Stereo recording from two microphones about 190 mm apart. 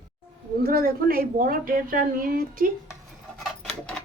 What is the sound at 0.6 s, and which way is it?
A woman's voice, 50° right (ahead or behind).